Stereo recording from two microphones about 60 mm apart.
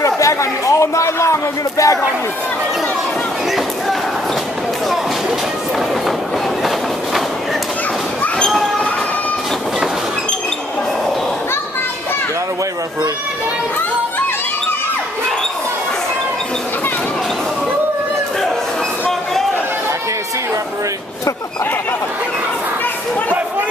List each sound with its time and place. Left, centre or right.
0.0 s a man's voice: left